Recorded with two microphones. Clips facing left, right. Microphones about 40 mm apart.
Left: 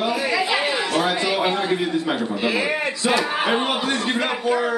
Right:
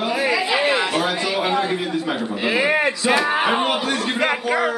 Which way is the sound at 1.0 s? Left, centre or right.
Centre.